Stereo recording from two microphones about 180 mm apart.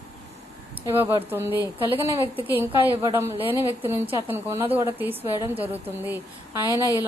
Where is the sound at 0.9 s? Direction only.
15° right (ahead or behind).